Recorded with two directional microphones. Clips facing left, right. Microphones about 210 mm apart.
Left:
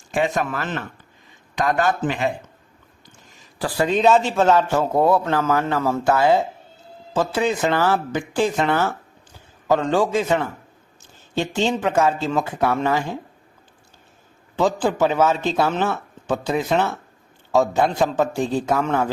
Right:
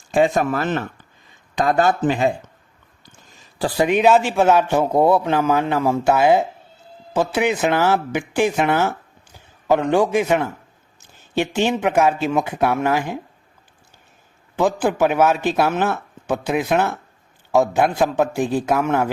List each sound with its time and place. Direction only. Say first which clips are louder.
0.1 s speech: right 5 dB; 35° right (ahead or behind)
3.6 s speech: right 2 dB; 15° right (ahead or behind)
14.5 s speech: right 1 dB; 10° right (ahead or behind)